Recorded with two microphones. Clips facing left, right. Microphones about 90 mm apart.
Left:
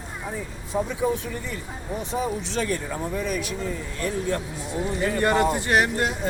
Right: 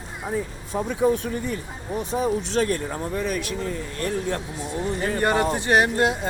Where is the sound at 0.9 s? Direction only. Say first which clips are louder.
Right 4 dB; 55° right (ahead or behind).